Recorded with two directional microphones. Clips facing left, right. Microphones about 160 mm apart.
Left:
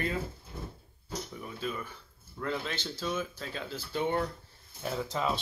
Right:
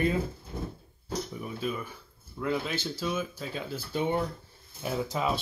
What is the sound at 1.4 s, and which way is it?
Speech, 10° right (ahead or behind).